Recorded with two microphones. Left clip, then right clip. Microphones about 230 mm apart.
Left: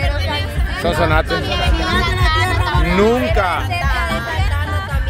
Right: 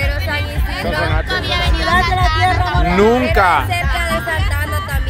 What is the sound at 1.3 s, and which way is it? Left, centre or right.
Speech, right.